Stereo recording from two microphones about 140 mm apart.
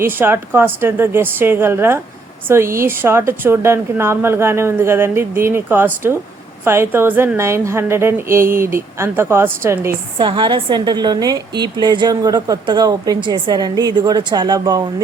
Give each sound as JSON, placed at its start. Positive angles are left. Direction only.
{"t": 0.0, "sound": "a woman's voice", "side_deg": -15}
{"t": 10.2, "sound": "a woman's voice", "side_deg": -35}